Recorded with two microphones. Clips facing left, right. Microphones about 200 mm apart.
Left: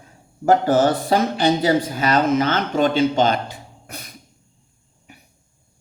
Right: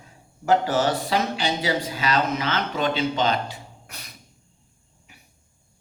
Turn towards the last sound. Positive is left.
turn(degrees=50)  # may be behind; listen again after turning